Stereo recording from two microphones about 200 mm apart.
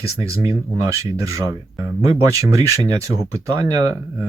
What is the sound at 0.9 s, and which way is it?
Speech, 15° right (ahead or behind).